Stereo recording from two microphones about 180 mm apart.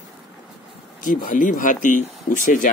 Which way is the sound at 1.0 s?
45° left (ahead or behind).